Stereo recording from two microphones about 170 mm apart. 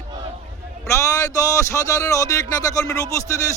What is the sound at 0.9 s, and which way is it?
A man's voice, 15° left (ahead or behind).